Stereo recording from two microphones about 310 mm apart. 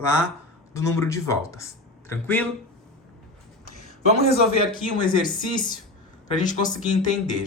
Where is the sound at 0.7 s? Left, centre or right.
Centre.